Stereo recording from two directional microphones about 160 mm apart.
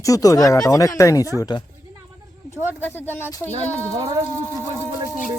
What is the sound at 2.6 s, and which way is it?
Speech, 15° left (ahead or behind).